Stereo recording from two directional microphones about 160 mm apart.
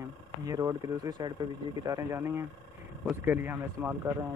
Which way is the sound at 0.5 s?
25° right (ahead or behind).